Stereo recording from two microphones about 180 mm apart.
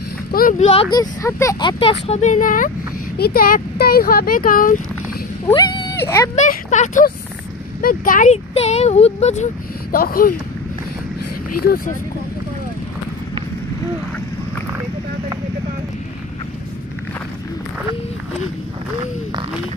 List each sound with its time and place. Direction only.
0.3 s speech: 50° left (ahead or behind)
0.9 s speech: 15° left (ahead or behind); by 4.8 s 50° left (ahead or behind)
5.5 s speech: 25° left (ahead or behind)
6.3 s speech: 40° left (ahead or behind)
8.5 s speech: 35° left (ahead or behind)
9.9 s speech: 55° left (ahead or behind)
11.6 s speech: 55° left (ahead or behind)